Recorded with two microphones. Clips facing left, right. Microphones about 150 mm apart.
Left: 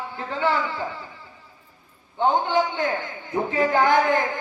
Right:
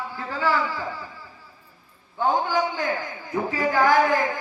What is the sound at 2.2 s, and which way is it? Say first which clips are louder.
A man's voice: left 2 dB; 25° left (ahead or behind).